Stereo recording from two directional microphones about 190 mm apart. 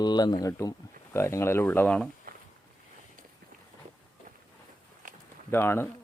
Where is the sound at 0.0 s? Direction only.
20° left (ahead or behind).